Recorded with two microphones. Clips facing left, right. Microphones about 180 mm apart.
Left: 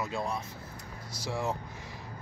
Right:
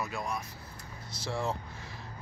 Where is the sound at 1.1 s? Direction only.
15° left (ahead or behind).